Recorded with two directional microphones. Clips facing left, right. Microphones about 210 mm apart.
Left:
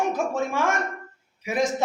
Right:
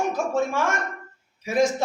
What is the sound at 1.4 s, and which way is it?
Speech, 20° left (ahead or behind).